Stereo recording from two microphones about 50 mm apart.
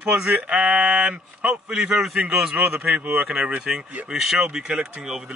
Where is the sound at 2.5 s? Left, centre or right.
Right.